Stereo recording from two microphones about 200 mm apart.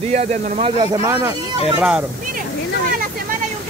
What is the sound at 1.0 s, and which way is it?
Speech, 10° right (ahead or behind).